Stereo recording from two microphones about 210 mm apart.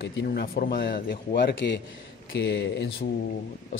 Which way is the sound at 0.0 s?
45° left (ahead or behind).